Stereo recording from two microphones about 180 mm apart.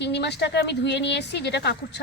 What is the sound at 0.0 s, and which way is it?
Speech, 70° left (ahead or behind).